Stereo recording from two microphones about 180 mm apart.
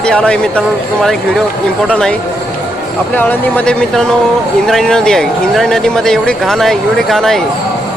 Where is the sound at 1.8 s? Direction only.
5° left (ahead or behind).